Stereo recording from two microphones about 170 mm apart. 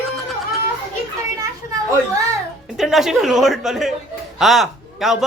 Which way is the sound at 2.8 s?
Centre (ahead or behind).